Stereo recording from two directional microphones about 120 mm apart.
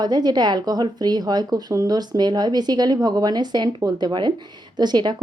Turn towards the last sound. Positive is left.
turn(degrees=-35)  # may be behind; listen again after turning